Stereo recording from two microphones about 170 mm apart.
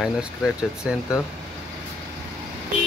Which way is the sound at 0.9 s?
5° right (ahead or behind).